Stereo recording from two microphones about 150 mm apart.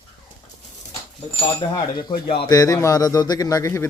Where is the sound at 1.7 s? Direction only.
30° left (ahead or behind).